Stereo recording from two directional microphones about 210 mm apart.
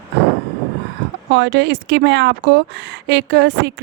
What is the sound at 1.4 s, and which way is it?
Speech, 55° right (ahead or behind).